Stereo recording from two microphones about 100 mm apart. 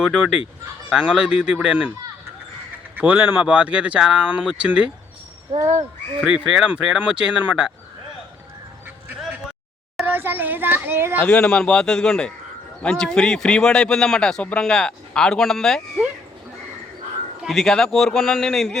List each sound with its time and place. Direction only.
0.0 s a man's voice: 5° right (ahead or behind)
2.9 s speech: 15° right (ahead or behind)
5.5 s speech: 55° right (ahead or behind)
6.2 s a man's voice: 5° right (ahead or behind)
10.1 s a child's voice: 20° right (ahead or behind)
11.2 s speech: 10° left (ahead or behind)
17.4 s a man's voice: centre (ahead or behind)